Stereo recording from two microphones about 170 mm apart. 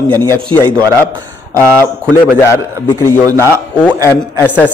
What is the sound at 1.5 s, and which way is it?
Speech, 15° left (ahead or behind).